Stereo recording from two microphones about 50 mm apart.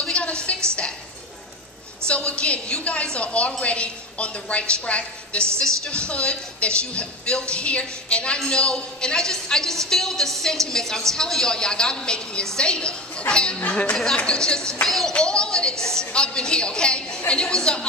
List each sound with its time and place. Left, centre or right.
0.1 s a sound: left
2.0 s a woman's voice: left
14.9 s speech: centre
15.1 s a woman's voice: centre